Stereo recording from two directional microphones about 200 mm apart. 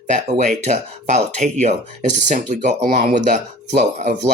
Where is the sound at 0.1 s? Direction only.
35° right (ahead or behind).